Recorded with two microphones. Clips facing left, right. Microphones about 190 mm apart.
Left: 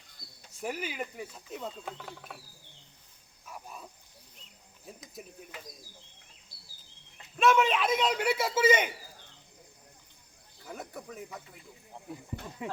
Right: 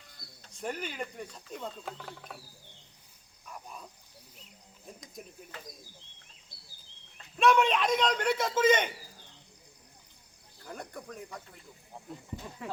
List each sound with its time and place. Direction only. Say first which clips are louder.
0.4 s speech: left 1 dB; 5° left (ahead or behind)
3.4 s a sound: even; 5° left (ahead or behind)
4.9 s speech: left 1 dB; 5° left (ahead or behind)
7.3 s speech: even; centre (ahead or behind)
10.6 s speech: even; 5° left (ahead or behind)
12.6 s speech: left 2 dB; 15° left (ahead or behind)